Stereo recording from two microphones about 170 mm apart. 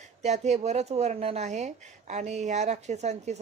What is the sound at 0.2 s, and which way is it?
Speech, 40° right (ahead or behind).